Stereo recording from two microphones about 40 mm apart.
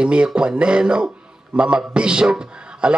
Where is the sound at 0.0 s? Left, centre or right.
Right.